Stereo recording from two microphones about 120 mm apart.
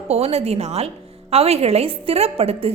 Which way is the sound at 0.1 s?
60° right (ahead or behind).